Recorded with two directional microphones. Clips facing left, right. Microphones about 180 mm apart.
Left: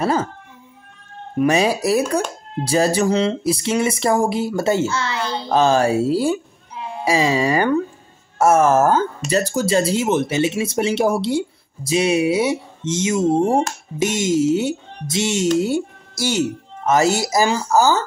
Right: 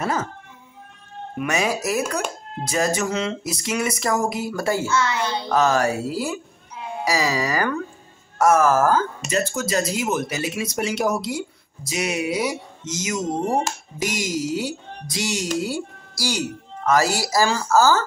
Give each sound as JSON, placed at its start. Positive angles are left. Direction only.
{"t": 0.0, "sound": "speech", "side_deg": 30}
{"t": 1.4, "sound": "speech", "side_deg": 30}